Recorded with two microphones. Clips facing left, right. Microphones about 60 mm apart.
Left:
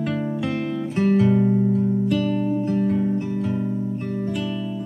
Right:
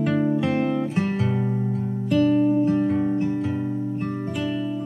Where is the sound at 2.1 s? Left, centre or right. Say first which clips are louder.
Right 3 dB; centre.